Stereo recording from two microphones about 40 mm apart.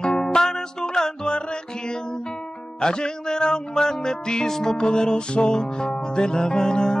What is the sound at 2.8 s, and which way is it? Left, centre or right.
Music, centre.